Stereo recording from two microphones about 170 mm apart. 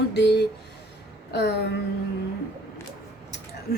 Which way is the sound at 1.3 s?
75° left (ahead or behind).